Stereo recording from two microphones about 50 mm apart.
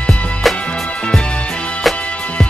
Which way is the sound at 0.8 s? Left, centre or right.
Left.